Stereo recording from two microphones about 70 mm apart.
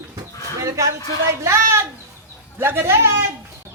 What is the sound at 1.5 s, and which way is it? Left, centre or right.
A man's voice, right.